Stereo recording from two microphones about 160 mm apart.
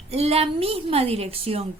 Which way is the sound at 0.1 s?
40° right (ahead or behind).